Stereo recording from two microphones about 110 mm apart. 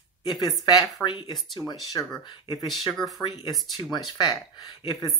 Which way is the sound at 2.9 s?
Centre (ahead or behind).